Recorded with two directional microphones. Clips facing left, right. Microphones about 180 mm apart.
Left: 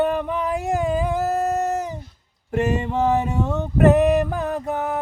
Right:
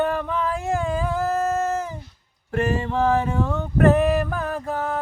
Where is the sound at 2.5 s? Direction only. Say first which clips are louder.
Left 1 dB; 20° left (ahead or behind).